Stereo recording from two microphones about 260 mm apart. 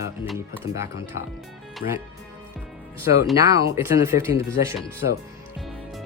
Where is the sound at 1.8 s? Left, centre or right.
Left.